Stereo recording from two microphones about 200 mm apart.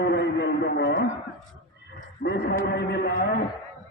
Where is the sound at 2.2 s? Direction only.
55° left (ahead or behind).